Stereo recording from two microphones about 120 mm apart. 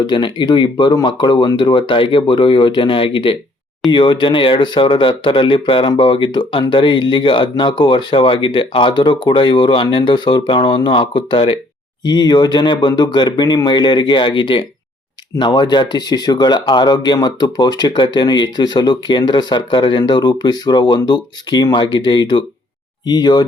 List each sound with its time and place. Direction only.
0.1 s speech: 40° left (ahead or behind)
12.0 s speech: 35° left (ahead or behind)